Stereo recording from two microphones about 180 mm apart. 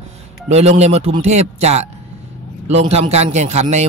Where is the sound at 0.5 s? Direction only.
35° right (ahead or behind).